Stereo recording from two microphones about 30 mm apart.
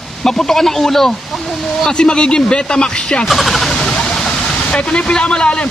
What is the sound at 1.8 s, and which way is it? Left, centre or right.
Speech, left.